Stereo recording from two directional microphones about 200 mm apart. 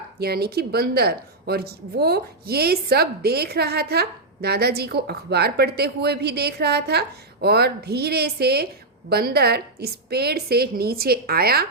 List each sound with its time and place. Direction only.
0.2 s speech: 50° right (ahead or behind)